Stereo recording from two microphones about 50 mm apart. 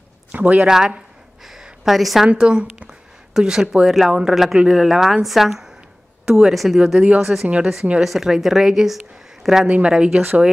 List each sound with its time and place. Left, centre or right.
0.3 s a man's voice: right
0.6 s a woman's voice: centre
1.4 s a sound: centre
2.2 s a woman's voice: centre
7.4 s speech: right
8.0 s a woman's voice: centre
9.7 s speech: right